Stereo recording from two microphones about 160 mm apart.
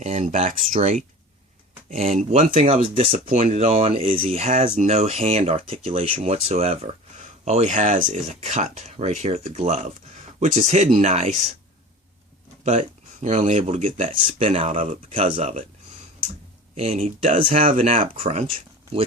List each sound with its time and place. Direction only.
0.0 s speech: 45° right (ahead or behind)
13.2 s speech: 45° right (ahead or behind)
16.7 s speech: 40° right (ahead or behind)